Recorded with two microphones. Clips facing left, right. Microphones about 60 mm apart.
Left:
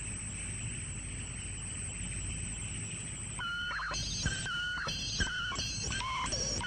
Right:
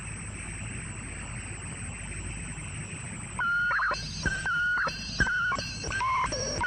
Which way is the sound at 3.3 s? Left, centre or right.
Right.